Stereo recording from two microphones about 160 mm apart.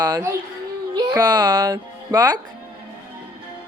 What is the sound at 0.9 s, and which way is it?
Music, 25° right (ahead or behind).